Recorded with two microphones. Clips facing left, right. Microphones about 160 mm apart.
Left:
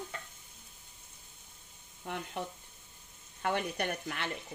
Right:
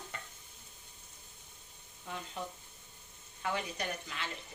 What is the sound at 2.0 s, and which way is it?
Stir, 60° left (ahead or behind).